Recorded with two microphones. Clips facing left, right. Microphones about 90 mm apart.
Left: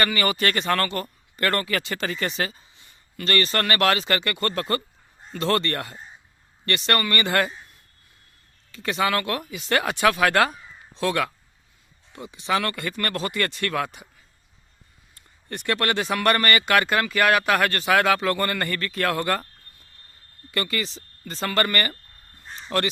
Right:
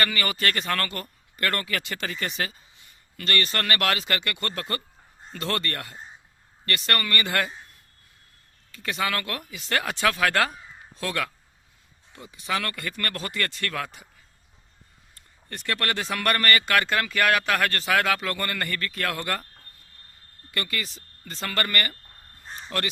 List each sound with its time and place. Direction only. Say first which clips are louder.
0.0 s speech: left 3 dB; 25° left (ahead or behind)
8.7 s speech: left 5 dB; 25° left (ahead or behind)
15.1 s speech: left 5 dB; 15° left (ahead or behind); by 19.4 s 35° left (ahead or behind)
20.5 s speech: left 4 dB; 30° left (ahead or behind)